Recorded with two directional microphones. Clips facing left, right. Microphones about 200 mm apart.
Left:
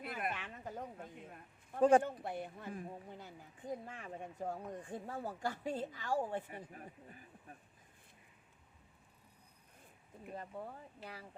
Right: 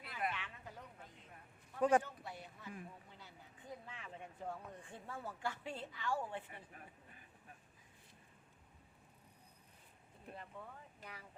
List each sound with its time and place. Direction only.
0.0 s a sound: 50° left (ahead or behind)
2.0 s speech: 55° left (ahead or behind); by 7.3 s 35° left (ahead or behind)
10.3 s speech: 40° left (ahead or behind)